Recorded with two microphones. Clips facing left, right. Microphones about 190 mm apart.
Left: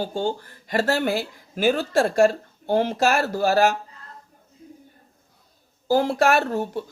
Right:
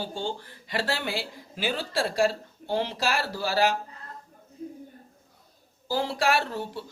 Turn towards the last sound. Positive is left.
turn(degrees=45)  # may be behind; listen again after turning